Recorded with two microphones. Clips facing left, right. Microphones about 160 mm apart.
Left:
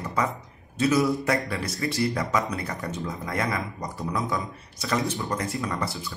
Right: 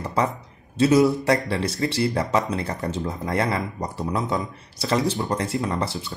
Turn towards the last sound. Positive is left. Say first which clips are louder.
# right 4 dB
turn(degrees=-25)  # may be behind; listen again after turning